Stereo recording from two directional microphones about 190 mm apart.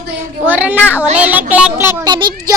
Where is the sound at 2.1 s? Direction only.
25° right (ahead or behind).